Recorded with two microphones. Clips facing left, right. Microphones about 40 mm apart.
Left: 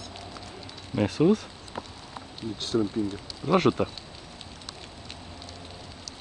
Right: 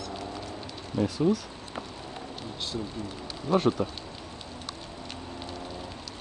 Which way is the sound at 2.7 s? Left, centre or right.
Left.